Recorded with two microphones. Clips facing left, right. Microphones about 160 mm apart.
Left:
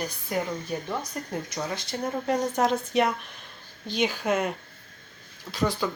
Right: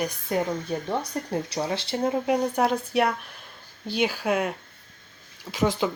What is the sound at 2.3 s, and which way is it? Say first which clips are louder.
A woman's voice: left 1 dB; 10° right (ahead or behind).